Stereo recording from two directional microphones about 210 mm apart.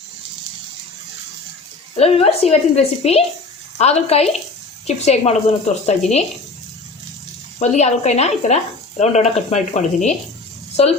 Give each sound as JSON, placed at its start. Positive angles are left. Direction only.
{"t": 2.0, "sound": "a woman's voice", "side_deg": 30}
{"t": 7.6, "sound": "speech", "side_deg": 30}